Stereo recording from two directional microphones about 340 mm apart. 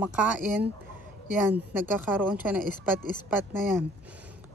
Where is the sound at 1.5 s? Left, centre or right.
Centre.